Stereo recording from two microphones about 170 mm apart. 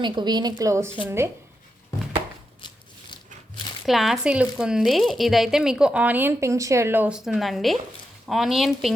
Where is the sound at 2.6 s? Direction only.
25° left (ahead or behind).